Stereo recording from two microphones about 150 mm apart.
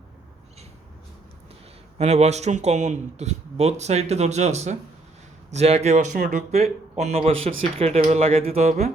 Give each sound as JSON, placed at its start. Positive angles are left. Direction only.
{"t": 2.0, "sound": "speech", "side_deg": -45}